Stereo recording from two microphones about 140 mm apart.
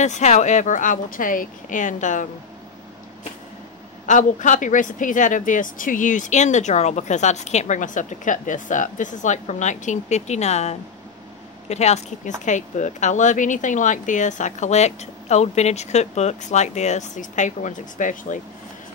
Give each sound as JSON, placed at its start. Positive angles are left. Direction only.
{"t": 0.0, "sound": "speech", "side_deg": 55}
{"t": 4.0, "sound": "speech", "side_deg": 65}